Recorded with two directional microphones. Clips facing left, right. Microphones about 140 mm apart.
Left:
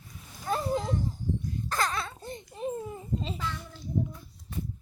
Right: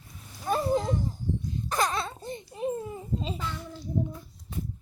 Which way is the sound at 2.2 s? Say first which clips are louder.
Right 3 dB; 10° right (ahead or behind).